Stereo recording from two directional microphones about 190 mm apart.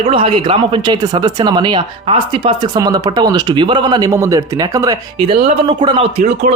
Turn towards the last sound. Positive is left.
turn(degrees=-35)  # may be behind; listen again after turning